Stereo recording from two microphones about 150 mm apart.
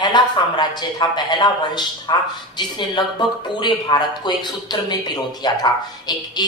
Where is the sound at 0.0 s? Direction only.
30° left (ahead or behind).